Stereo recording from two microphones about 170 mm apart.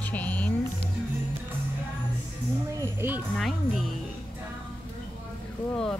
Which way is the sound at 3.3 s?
Centre (ahead or behind).